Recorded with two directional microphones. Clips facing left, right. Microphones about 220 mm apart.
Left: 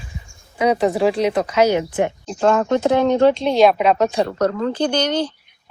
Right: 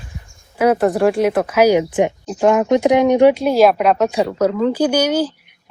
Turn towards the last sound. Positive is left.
turn(degrees=-5)  # may be behind; listen again after turning